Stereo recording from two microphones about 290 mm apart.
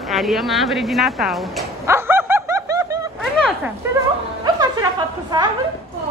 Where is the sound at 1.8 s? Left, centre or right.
Centre.